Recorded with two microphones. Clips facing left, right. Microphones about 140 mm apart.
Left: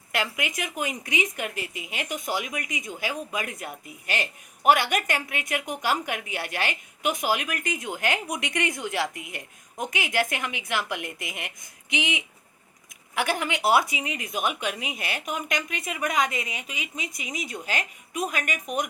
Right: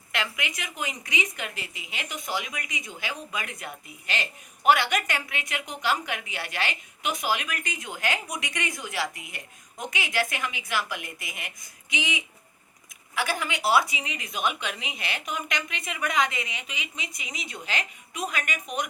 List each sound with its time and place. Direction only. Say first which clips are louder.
0.1 s a woman's voice: left 3 dB; 45° left (ahead or behind)
13.7 s a woman's voice: left 1 dB; 50° left (ahead or behind)